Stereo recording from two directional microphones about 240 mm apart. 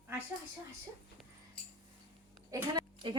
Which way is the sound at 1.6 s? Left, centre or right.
Centre.